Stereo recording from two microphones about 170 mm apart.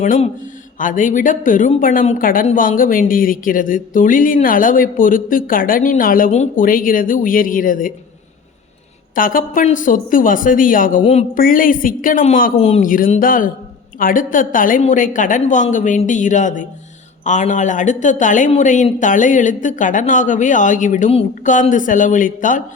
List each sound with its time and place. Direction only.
0.0 s a woman's voice: 45° left (ahead or behind)
9.1 s a woman's voice: 55° left (ahead or behind)
11.0 s speech: 40° left (ahead or behind)
11.3 s a woman's voice: 55° left (ahead or behind)
12.5 s speech: 35° left (ahead or behind)
12.8 s a woman's voice: 55° left (ahead or behind)